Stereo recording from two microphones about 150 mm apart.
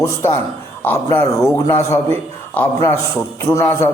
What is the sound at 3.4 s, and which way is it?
Speech, 15° left (ahead or behind).